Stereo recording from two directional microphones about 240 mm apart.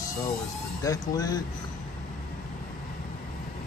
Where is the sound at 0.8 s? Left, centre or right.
Centre.